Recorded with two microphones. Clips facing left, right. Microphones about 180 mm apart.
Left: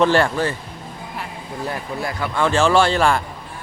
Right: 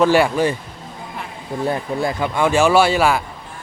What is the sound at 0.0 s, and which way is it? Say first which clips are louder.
Speech: right 2 dB; 10° right (ahead or behind).